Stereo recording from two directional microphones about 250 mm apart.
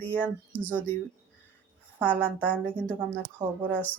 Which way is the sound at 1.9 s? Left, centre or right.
Centre.